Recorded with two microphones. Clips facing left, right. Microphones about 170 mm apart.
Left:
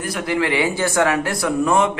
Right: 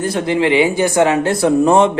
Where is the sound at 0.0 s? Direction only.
25° right (ahead or behind).